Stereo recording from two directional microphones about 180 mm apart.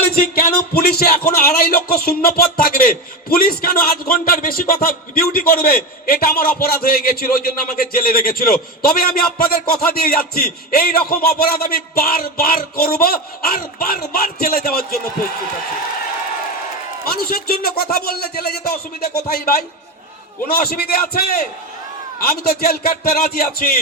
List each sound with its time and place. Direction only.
0.1 s speech: 55° left (ahead or behind)
17.1 s speech: 55° left (ahead or behind)